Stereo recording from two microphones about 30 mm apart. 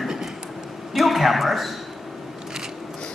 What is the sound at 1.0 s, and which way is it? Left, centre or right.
Speech, centre.